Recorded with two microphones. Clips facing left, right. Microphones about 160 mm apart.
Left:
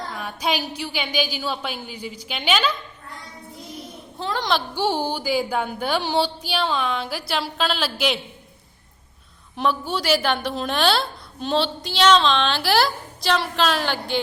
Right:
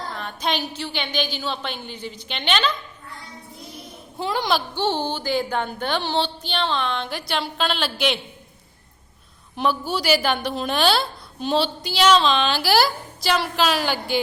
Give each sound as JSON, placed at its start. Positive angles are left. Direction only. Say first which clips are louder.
{"t": 0.1, "sound": "music", "louder": "left 1 dB", "side_deg": 10}
{"t": 4.2, "sound": "speech", "louder": "right 1 dB", "side_deg": -10}
{"t": 4.7, "sound": "music", "louder": "left 1 dB", "side_deg": 10}
{"t": 9.6, "sound": "a woman's voice", "louder": "even", "side_deg": 0}